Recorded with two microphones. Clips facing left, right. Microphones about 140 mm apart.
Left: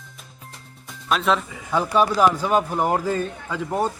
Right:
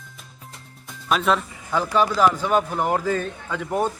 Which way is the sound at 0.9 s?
Centre (ahead or behind).